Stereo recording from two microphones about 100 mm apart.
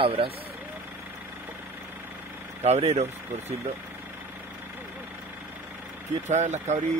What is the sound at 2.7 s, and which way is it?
Speech, 90° right.